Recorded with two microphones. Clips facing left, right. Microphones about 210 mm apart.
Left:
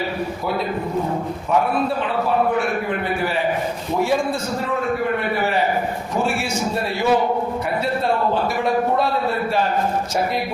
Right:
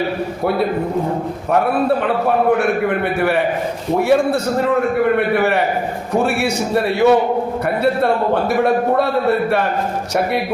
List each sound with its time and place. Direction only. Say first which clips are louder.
3.2 s a man's voice: right 5 dB; 65° right (ahead or behind)